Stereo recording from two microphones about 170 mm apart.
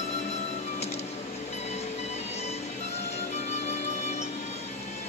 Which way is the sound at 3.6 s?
40° left (ahead or behind).